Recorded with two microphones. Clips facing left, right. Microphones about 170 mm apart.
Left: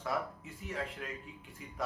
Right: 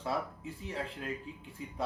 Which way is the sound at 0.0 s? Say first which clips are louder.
Right 1 dB; 30° right (ahead or behind).